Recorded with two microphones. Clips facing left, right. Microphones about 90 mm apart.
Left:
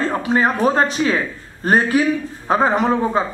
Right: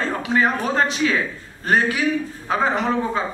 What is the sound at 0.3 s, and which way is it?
A man's voice, 35° left (ahead or behind).